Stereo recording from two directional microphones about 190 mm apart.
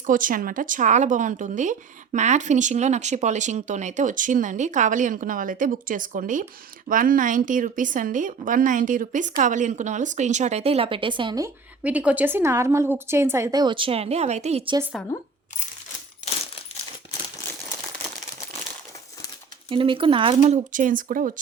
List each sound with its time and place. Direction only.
0.0 s a woman's voice: 45° right (ahead or behind); by 11.5 s 20° right (ahead or behind)
11.8 s a woman's voice: 5° right (ahead or behind); by 14.8 s 30° right (ahead or behind)
15.1 s speech: 15° left (ahead or behind)
19.7 s a woman's voice: 25° right (ahead or behind); by 21.3 s 45° right (ahead or behind)